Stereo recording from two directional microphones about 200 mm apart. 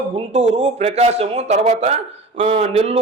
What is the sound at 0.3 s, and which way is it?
A man's voice, 30° right (ahead or behind).